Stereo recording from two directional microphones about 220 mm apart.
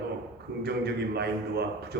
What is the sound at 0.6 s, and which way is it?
A man's voice, 50° right (ahead or behind).